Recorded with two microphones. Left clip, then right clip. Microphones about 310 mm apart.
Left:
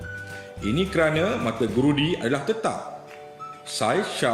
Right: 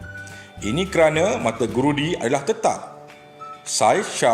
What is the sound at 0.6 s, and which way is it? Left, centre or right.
Speech, centre.